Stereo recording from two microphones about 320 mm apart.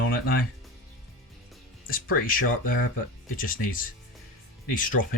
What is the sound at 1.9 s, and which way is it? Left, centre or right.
Speech, left.